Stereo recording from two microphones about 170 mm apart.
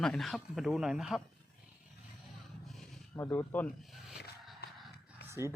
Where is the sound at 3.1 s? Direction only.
15° left (ahead or behind).